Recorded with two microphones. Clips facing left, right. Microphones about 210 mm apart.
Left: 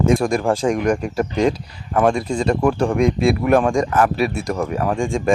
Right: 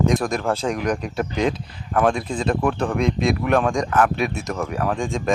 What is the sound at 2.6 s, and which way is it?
Speech, 10° left (ahead or behind).